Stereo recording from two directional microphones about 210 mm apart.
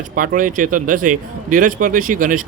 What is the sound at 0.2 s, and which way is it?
Speech, 40° right (ahead or behind).